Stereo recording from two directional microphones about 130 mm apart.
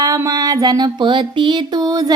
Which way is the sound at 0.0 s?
25° right (ahead or behind).